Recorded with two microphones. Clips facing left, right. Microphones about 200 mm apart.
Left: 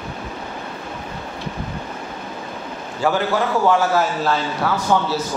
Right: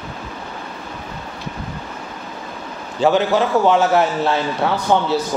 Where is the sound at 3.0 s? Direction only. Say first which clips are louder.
Right 4 dB; 20° right (ahead or behind).